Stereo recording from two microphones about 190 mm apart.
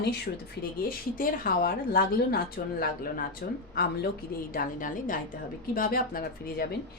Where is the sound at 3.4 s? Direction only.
55° left (ahead or behind).